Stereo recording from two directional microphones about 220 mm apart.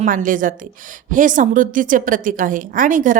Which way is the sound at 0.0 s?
40° right (ahead or behind).